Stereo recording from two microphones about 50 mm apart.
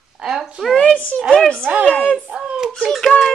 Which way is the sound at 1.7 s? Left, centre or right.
Right.